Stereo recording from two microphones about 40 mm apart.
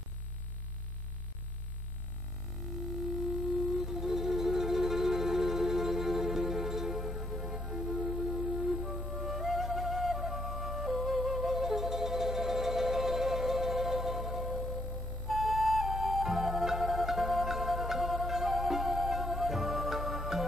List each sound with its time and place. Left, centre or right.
3.5 s music: centre